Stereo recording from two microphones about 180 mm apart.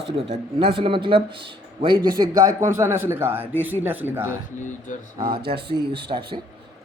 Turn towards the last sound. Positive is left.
turn(degrees=-35)  # may be behind; listen again after turning